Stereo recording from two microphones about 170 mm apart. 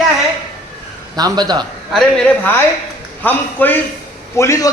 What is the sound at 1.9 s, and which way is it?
A man's voice, 5° left (ahead or behind).